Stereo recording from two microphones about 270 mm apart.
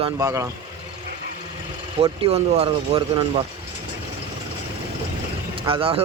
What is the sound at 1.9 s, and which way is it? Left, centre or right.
Speech, right.